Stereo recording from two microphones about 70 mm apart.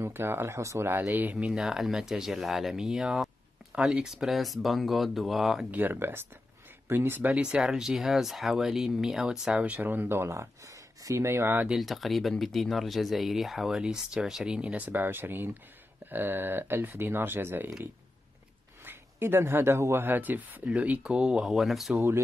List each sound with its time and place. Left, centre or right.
0.0 s speech: right
0.8 s speech: right
1.4 s speech: centre
5.7 s speech: right
7.4 s speech: centre
9.6 s speech: right
11.8 s speech: centre; by 17.6 s right
18.9 s speech: right; by 21.9 s centre
21.9 s speech: right